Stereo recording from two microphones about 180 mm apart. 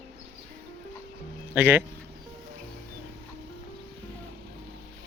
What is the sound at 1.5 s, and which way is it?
Speech, 10° right (ahead or behind).